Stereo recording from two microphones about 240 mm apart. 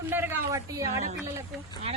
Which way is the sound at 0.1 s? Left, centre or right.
Centre.